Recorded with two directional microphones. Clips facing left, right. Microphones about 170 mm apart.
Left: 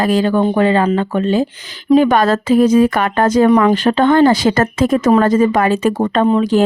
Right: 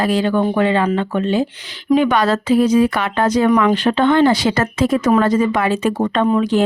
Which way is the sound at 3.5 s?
35° left (ahead or behind).